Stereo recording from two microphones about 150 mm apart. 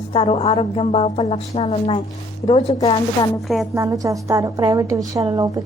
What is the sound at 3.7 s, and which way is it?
A woman's voice, 20° right (ahead or behind).